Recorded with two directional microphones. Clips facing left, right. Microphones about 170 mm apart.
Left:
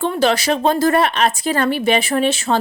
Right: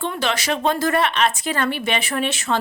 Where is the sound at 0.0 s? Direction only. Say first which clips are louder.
Left 7 dB; 40° left (ahead or behind).